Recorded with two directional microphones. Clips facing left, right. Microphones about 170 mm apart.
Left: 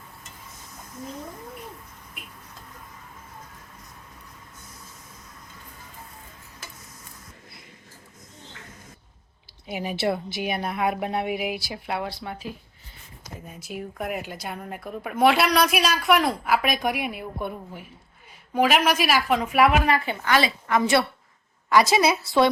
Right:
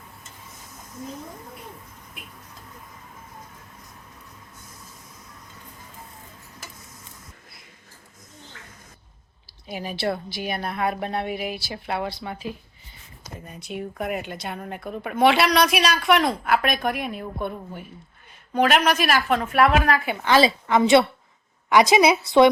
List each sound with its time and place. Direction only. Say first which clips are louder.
9.6 s a woman's voice: left 1 dB; 15° left (ahead or behind)
20.2 s a woman's voice: right 7 dB; 25° right (ahead or behind)